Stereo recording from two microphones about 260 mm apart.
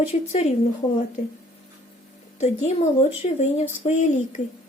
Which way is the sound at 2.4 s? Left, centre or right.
Left.